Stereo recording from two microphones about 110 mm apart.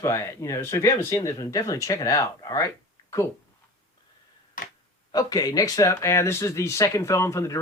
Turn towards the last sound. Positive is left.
turn(degrees=30)  # may be behind; listen again after turning